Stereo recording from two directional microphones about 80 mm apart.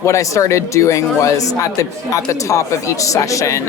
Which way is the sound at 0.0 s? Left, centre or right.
Left.